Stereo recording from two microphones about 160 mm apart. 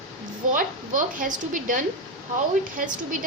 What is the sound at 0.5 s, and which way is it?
Speech, 55° right (ahead or behind).